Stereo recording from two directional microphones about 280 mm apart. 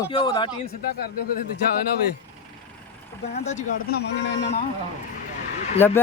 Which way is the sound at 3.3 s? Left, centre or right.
Left.